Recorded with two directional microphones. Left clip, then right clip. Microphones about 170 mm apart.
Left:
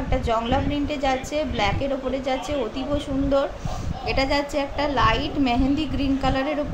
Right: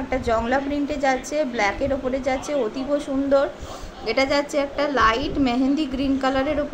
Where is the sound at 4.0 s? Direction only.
15° right (ahead or behind).